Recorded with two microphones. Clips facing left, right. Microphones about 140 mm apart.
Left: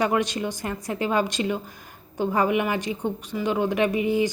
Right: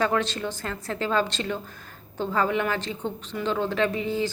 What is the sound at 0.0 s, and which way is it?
A woman's voice, 15° left (ahead or behind).